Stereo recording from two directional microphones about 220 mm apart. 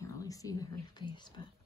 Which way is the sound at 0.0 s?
15° left (ahead or behind).